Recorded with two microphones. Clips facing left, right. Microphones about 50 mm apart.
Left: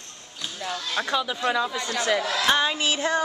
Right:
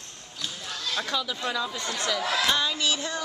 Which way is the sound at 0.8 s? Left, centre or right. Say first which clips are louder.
Left 3 dB; centre.